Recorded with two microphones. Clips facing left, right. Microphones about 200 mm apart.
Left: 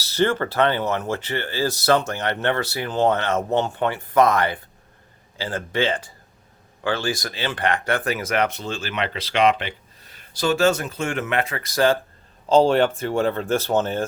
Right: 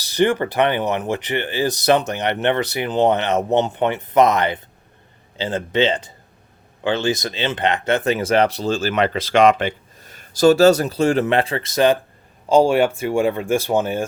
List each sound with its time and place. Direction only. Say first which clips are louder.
0.0 s speech: right 3 dB; 15° right (ahead or behind)
12.5 s speech: right 2 dB; 10° right (ahead or behind)